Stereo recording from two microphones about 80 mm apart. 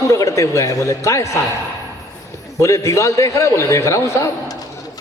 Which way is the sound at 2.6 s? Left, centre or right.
Left.